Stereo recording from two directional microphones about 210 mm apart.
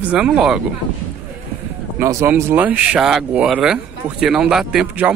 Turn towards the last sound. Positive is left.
turn(degrees=-5)  # may be behind; listen again after turning